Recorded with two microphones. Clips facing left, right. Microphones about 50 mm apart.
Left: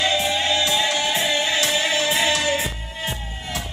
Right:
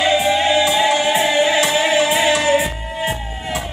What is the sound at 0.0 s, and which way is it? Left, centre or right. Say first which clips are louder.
Music: right 6 dB; centre.